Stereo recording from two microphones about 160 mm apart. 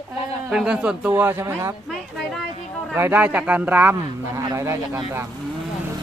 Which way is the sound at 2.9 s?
15° right (ahead or behind).